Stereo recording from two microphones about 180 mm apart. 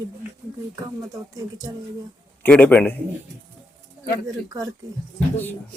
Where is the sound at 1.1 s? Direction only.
20° right (ahead or behind).